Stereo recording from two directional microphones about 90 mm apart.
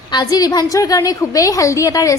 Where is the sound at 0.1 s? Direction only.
50° left (ahead or behind).